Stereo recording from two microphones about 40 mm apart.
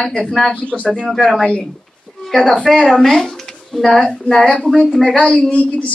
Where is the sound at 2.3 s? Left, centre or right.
Centre.